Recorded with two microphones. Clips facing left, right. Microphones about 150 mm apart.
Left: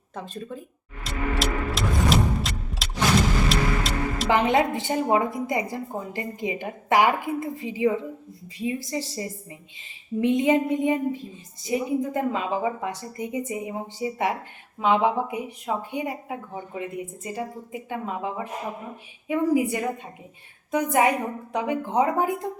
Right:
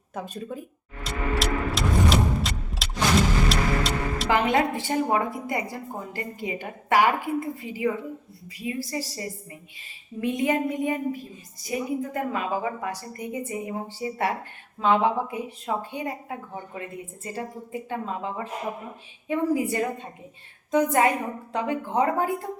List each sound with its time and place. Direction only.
0.1 s speech: 10° right (ahead or behind)
1.0 s vehicle: centre (ahead or behind)
3.5 s music: centre (ahead or behind)
4.3 s a woman's voice: 20° left (ahead or behind)